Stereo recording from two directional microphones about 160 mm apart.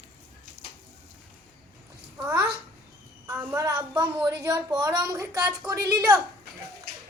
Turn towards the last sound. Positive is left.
turn(degrees=-20)  # may be behind; listen again after turning